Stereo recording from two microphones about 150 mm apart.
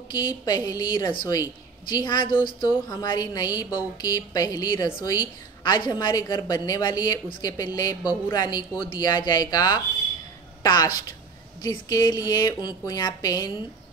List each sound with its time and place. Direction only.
0.1 s a woman's voice: 25° left (ahead or behind)